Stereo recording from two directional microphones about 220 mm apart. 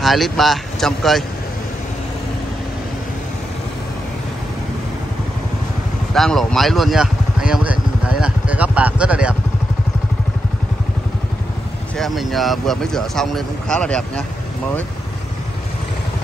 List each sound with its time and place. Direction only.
0.0 s speech: centre (ahead or behind)
6.1 s speech: centre (ahead or behind)
12.0 s speech: centre (ahead or behind)